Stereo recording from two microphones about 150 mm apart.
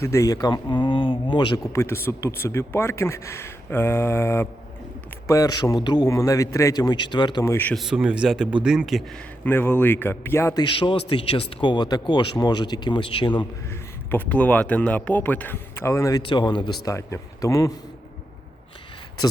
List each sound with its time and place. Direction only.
0.0 s speech: 20° left (ahead or behind)
1.7 s a man's voice: 15° left (ahead or behind)
7.4 s speech: 15° left (ahead or behind)
7.8 s speech: 5° right (ahead or behind)
9.4 s speech: 15° left (ahead or behind)
10.6 s speech: 35° left (ahead or behind)
14.1 s speech: 10° left (ahead or behind)
16.2 s speech: 30° left (ahead or behind)
16.9 s a man's voice: 20° left (ahead or behind)